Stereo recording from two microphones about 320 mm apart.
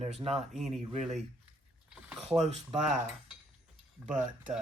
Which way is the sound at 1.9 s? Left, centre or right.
Centre.